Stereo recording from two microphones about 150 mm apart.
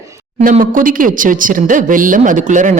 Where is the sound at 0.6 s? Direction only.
65° right (ahead or behind).